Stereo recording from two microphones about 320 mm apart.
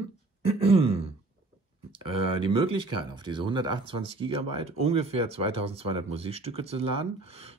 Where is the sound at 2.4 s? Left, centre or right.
Centre.